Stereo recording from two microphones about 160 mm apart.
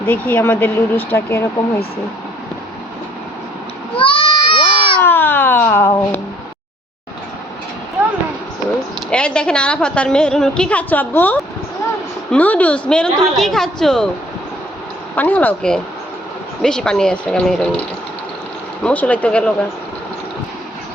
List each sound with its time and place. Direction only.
0.0 s speech: 10° left (ahead or behind)
3.9 s a sound: 35° left (ahead or behind)
4.9 s a sound: 10° left (ahead or behind)
9.0 s a woman's voice: 5° left (ahead or behind)
15.1 s a woman's voice: 10° left (ahead or behind)
18.8 s speech: 10° left (ahead or behind)